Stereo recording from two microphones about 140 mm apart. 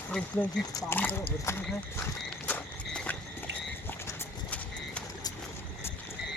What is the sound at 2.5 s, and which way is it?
Walk, 10° left (ahead or behind).